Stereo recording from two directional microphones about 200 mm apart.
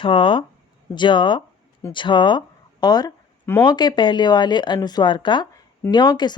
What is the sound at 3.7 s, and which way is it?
Speech, 20° left (ahead or behind).